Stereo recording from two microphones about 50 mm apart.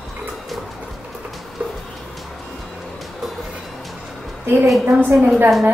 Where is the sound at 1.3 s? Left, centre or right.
Centre.